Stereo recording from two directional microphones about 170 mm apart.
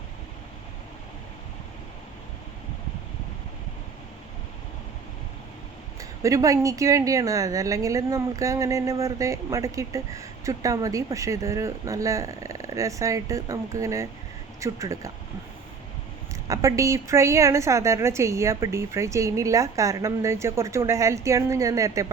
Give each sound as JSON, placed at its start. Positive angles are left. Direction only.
{"t": 6.0, "sound": "a woman's voice", "side_deg": -20}
{"t": 16.3, "sound": "a woman's voice", "side_deg": -15}